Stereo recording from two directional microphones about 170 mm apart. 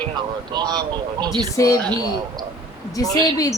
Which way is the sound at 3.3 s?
20° left (ahead or behind).